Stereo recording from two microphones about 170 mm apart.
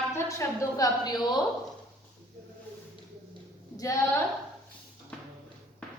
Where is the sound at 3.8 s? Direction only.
20° left (ahead or behind).